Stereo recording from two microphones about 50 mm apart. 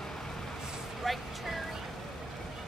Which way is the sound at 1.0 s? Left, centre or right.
Centre.